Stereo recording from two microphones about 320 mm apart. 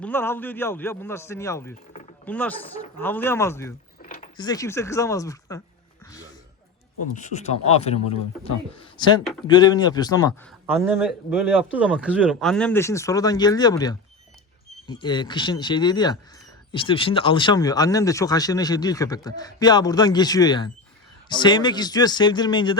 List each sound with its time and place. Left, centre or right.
0.0 s speech: centre
4.0 s a sound: left
4.4 s speech: centre
7.1 s speech: left
10.7 s speech: centre